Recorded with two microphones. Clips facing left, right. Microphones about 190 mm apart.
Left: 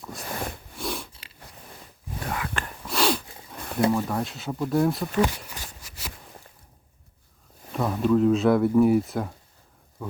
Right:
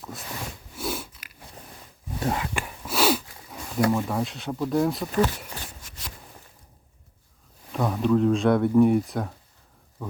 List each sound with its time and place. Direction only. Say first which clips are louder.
0.3 s a sound: left 7 dB; 55° left (ahead or behind)
0.8 s biting: right 1 dB; 5° right (ahead or behind)
1.1 s biting: even; 30° left (ahead or behind)
2.2 s whispering: right 5 dB; 25° right (ahead or behind)
2.5 s whispering: right 1 dB; 10° right (ahead or behind)
3.9 s speech: even; centre (ahead or behind)
5.8 s a sound: left 2 dB; 5° left (ahead or behind)
7.7 s speech: even; centre (ahead or behind)